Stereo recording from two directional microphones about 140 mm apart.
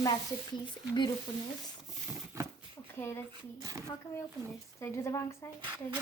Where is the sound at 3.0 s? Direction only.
20° left (ahead or behind).